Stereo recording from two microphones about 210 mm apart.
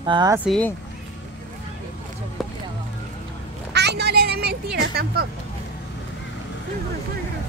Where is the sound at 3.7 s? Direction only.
50° right (ahead or behind).